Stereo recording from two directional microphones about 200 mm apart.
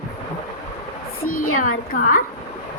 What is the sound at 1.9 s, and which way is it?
Speech, 45° left (ahead or behind).